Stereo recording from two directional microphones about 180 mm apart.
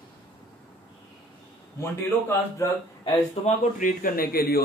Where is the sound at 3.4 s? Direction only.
50° left (ahead or behind).